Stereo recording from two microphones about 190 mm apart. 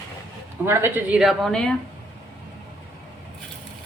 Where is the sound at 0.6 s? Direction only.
10° right (ahead or behind); by 1.7 s 5° left (ahead or behind).